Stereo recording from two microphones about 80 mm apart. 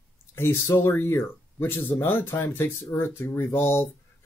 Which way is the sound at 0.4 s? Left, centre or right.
Left.